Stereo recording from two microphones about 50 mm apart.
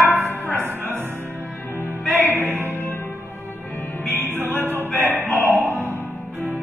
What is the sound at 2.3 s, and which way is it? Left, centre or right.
Music, right.